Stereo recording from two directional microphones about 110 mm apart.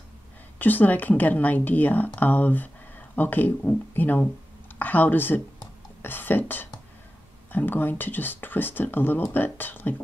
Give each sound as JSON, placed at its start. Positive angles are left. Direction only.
{"t": 0.6, "sound": "speech", "side_deg": 15}